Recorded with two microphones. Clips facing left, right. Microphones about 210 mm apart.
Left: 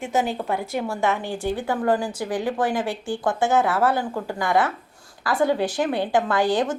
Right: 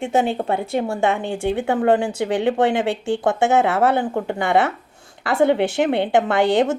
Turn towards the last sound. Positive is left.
turn(degrees=-25)  # may be behind; listen again after turning